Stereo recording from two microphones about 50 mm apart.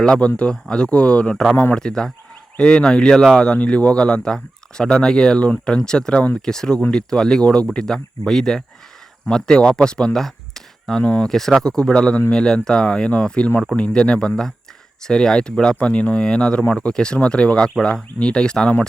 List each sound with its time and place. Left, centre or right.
0.0 s a man's voice: left
11.0 s a man's voice: left
11.3 s a man's voice: centre